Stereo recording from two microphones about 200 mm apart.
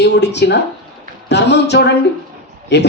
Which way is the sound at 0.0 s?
60° left (ahead or behind).